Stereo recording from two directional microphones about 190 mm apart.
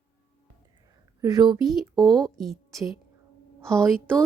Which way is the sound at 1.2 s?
20° right (ahead or behind).